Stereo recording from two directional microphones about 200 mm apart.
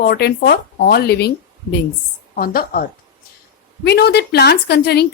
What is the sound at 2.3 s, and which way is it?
Speech, 45° left (ahead or behind).